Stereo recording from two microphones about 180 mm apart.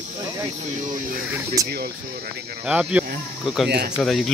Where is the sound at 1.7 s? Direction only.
60° right (ahead or behind).